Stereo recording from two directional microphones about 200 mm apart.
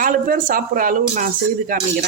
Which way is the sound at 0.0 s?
45° right (ahead or behind).